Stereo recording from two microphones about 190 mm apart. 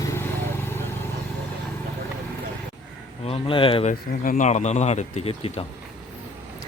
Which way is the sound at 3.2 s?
30° left (ahead or behind).